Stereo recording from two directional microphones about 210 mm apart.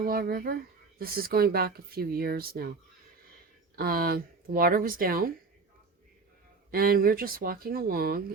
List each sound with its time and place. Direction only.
0.0 s speech: 45° right (ahead or behind)
3.8 s speech: 45° right (ahead or behind)
6.7 s speech: 45° right (ahead or behind)